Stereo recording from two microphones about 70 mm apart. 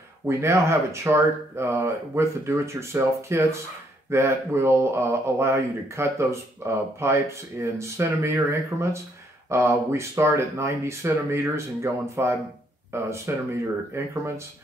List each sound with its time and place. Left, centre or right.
0.3 s speech: right